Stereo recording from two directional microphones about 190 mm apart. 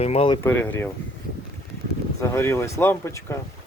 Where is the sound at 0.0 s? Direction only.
30° left (ahead or behind).